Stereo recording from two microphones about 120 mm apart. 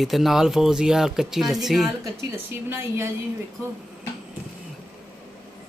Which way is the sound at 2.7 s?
20° right (ahead or behind).